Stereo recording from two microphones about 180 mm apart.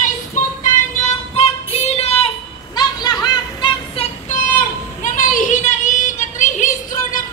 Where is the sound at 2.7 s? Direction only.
20° left (ahead or behind).